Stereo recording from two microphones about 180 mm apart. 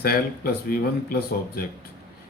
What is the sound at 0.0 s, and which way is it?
Speech, 55° left (ahead or behind).